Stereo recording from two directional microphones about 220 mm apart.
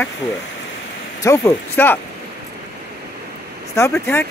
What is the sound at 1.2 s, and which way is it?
Speech, 15° left (ahead or behind).